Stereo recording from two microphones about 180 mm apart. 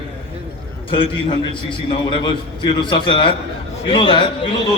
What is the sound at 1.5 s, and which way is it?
Speech, 25° left (ahead or behind).